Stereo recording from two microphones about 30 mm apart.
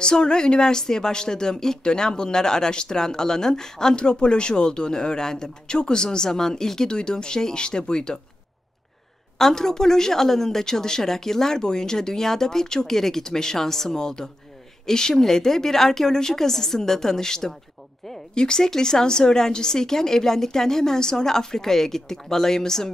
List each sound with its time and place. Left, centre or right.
0.0 s speech: left
3.9 s speech: left
9.4 s a woman's voice: centre